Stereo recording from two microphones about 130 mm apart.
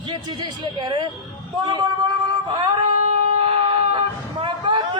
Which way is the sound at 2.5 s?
35° right (ahead or behind).